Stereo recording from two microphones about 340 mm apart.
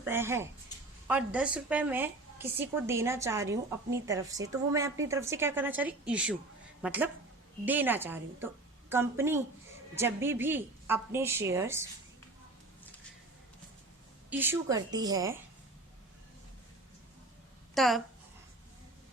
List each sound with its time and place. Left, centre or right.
0.0 s a woman's voice: centre
14.3 s a woman's voice: centre
17.7 s speech: centre